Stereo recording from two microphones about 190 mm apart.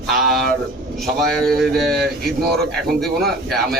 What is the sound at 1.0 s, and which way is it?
Speech, centre (ahead or behind).